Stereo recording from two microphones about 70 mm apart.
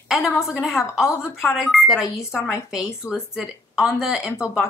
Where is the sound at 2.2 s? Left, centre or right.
Left.